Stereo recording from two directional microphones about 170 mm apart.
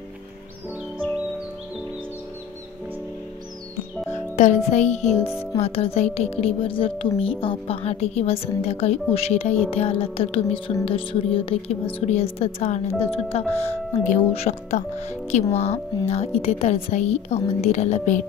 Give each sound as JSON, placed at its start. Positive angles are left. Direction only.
{"t": 4.1, "sound": "music", "side_deg": 45}
{"t": 5.6, "sound": "speech", "side_deg": 35}